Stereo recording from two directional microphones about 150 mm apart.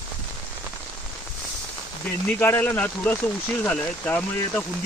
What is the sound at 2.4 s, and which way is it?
Speech, 15° left (ahead or behind).